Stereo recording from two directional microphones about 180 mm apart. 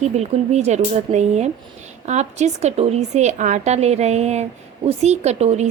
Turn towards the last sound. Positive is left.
turn(degrees=-35)  # may be behind; listen again after turning